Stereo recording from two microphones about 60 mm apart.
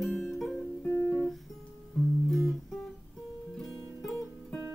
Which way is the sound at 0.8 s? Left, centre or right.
Left.